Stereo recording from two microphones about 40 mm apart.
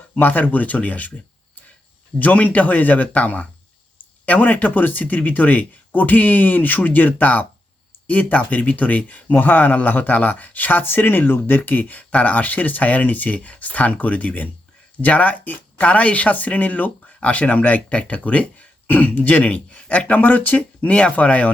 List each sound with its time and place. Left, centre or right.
0.2 s speech: left